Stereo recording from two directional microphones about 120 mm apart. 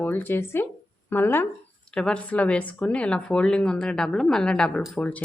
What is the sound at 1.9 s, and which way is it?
Speech, 5° left (ahead or behind).